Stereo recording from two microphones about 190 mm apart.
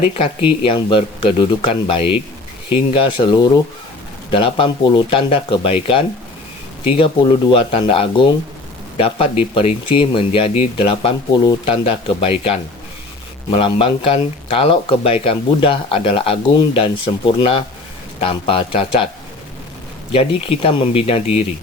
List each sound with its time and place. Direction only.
0.2 s speech: 25° left (ahead or behind)
20.1 s speech: 30° left (ahead or behind)